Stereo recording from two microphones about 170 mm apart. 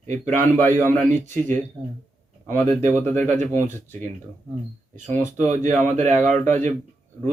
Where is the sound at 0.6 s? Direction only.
10° left (ahead or behind).